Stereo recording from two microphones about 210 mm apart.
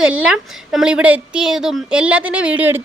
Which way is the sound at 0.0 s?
5° right (ahead or behind).